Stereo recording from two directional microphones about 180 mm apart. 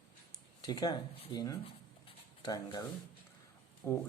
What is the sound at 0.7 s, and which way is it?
Speech, 20° left (ahead or behind).